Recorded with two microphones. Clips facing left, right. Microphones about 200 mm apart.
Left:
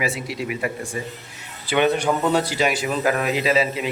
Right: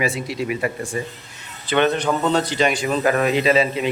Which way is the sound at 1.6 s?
10° left (ahead or behind).